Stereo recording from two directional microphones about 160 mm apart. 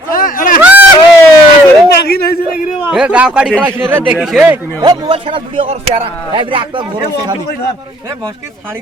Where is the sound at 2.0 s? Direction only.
70° left (ahead or behind).